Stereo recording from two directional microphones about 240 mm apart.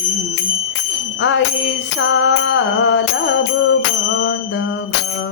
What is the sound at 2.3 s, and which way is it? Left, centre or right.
Music, left.